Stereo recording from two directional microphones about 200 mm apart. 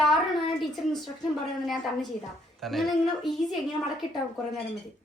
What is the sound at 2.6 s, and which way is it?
Speech, centre (ahead or behind).